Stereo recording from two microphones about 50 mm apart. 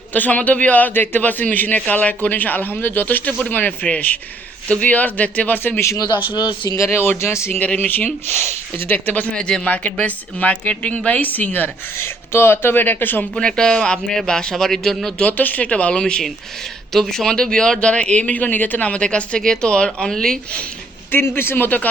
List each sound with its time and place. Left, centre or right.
0.1 s a man's voice: left
6.9 s speech: left
7.8 s a man's voice: left
9.3 s a woman's voice: centre
11.9 s speech: left
13.3 s speech: centre
15.2 s a woman's voice: left; by 20.4 s centre
21.1 s speech: left